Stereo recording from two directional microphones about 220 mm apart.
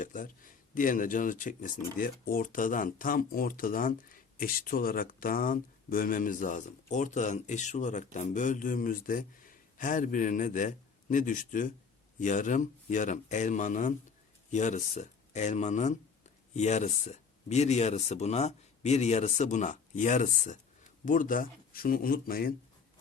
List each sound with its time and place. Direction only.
0.0 s speech: 40° left (ahead or behind)